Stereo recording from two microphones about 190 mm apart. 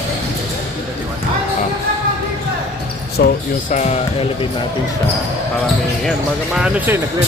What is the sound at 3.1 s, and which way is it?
Speech, 45° left (ahead or behind).